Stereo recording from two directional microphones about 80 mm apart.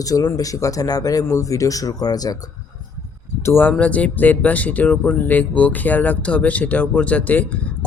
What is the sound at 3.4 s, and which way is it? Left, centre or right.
Speech, left.